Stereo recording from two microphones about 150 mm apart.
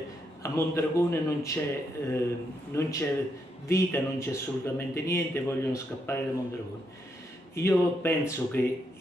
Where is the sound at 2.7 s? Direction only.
20° left (ahead or behind).